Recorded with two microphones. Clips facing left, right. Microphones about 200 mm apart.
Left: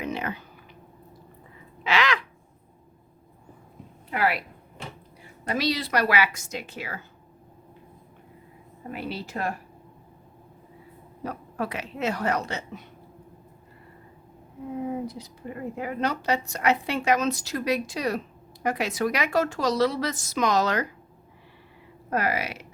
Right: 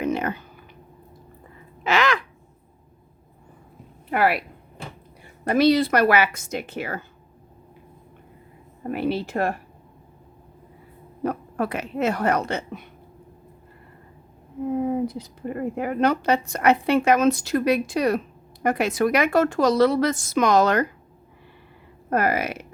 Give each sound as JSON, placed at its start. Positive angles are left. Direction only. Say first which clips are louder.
{"t": 0.0, "sound": "clicking", "louder": "right 6 dB", "side_deg": -50}
{"t": 1.8, "sound": "crow", "louder": "right 3 dB", "side_deg": -45}
{"t": 4.1, "sound": "speech", "louder": "right 5 dB", "side_deg": -60}
{"t": 5.5, "sound": "a woman's voice", "louder": "right 9 dB", "side_deg": -55}
{"t": 8.9, "sound": "speech", "louder": "right 9 dB", "side_deg": -55}
{"t": 11.2, "sound": "speech", "louder": "right 6 dB", "side_deg": -55}
{"t": 14.7, "sound": "a woman's voice", "louder": "right 6 dB", "side_deg": -55}
{"t": 22.1, "sound": "a woman's voice", "louder": "right 4 dB", "side_deg": -50}